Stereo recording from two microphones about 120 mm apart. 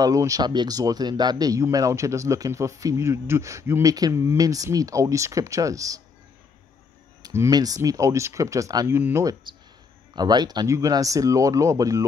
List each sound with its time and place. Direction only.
0.0 s speech: 30° right (ahead or behind)
7.2 s speech: 30° right (ahead or behind)
10.1 s speech: 35° right (ahead or behind)